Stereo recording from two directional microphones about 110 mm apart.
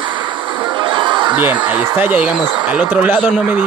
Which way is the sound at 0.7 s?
45° right (ahead or behind).